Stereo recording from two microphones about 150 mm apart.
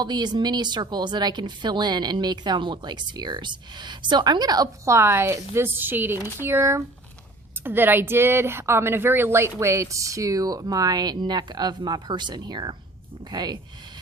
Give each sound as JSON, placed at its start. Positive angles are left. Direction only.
{"t": 0.0, "sound": "speech", "side_deg": -30}